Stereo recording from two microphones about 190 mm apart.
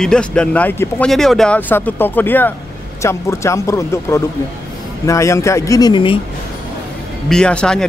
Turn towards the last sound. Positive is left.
turn(degrees=5)  # may be behind; listen again after turning